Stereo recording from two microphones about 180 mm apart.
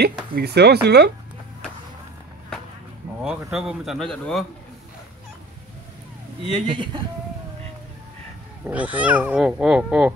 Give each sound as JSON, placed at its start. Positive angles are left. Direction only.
{"t": 0.0, "sound": "speech", "side_deg": -65}
{"t": 3.2, "sound": "speech", "side_deg": -5}
{"t": 6.7, "sound": "speech", "side_deg": -25}
{"t": 8.6, "sound": "speech", "side_deg": -10}